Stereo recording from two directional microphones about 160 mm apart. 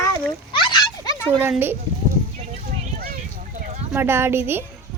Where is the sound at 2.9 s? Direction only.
65° right (ahead or behind).